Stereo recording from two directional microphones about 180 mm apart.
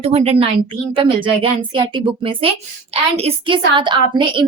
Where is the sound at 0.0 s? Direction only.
35° right (ahead or behind).